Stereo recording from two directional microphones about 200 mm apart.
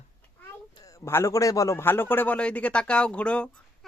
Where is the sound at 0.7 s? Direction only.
20° left (ahead or behind).